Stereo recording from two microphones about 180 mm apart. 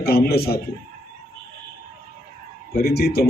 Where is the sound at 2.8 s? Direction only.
60° left (ahead or behind).